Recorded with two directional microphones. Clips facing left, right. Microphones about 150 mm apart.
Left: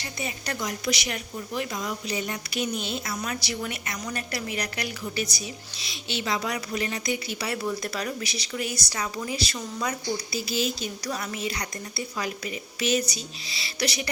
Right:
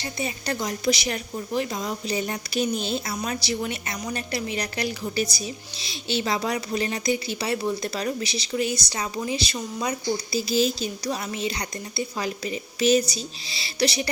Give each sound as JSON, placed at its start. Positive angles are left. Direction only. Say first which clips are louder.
{"t": 0.0, "sound": "a woman's voice", "louder": "right 4 dB", "side_deg": -30}
{"t": 10.3, "sound": "a woman's voice", "louder": "right 8 dB", "side_deg": -30}